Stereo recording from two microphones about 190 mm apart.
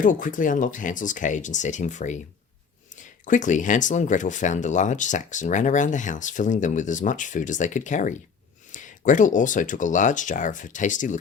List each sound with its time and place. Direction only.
0.0 s speech: 45° left (ahead or behind)